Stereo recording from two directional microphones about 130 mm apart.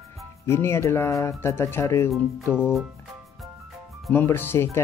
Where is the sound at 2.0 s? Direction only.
Centre (ahead or behind).